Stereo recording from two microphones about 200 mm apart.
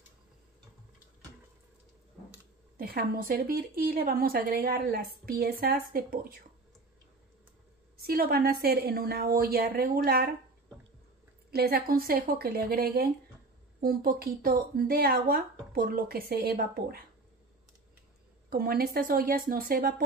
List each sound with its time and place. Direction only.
2.8 s speech: 50° right (ahead or behind)
8.0 s speech: 50° right (ahead or behind)
11.5 s speech: 50° right (ahead or behind)
18.5 s speech: 50° right (ahead or behind)